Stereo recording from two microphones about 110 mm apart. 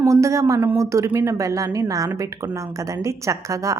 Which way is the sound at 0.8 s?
30° right (ahead or behind).